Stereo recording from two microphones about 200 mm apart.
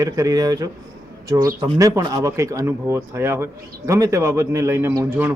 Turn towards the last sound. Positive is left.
turn(degrees=-15)  # may be behind; listen again after turning